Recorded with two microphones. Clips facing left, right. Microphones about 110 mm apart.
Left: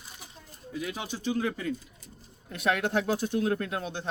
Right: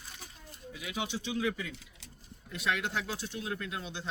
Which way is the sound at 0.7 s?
40° left (ahead or behind).